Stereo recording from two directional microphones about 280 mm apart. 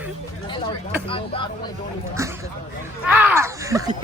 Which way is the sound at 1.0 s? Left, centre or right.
Centre.